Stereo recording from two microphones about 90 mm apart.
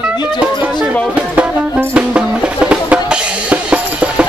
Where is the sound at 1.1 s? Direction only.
15° right (ahead or behind).